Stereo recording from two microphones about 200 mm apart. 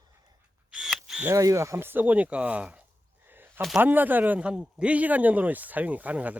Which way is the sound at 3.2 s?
10° right (ahead or behind).